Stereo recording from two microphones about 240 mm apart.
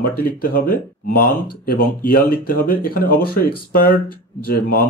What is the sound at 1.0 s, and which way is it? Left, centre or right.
Speech, left.